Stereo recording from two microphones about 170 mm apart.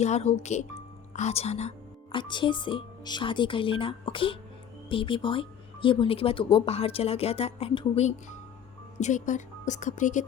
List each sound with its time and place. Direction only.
0.0 s a woman's voice: 40° left (ahead or behind)
2.1 s speech: 30° left (ahead or behind); by 10.2 s 45° left (ahead or behind)